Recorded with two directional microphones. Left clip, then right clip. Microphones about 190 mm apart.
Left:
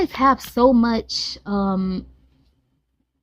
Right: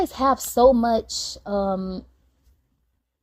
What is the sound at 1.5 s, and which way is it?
Speech, 20° left (ahead or behind).